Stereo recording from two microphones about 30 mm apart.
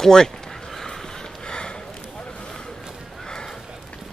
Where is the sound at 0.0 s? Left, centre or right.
Centre.